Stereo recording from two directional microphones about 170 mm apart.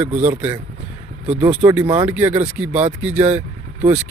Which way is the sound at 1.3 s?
40° right (ahead or behind).